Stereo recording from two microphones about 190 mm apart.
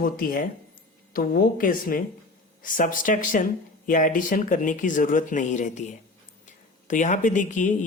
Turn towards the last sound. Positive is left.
turn(degrees=40)  # may be behind; listen again after turning